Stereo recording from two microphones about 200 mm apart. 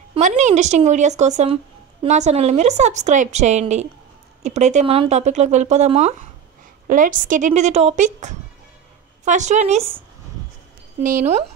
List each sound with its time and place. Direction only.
0.1 s speech: 35° right (ahead or behind)